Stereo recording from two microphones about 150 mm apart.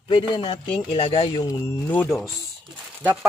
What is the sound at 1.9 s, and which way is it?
Speech, 10° left (ahead or behind).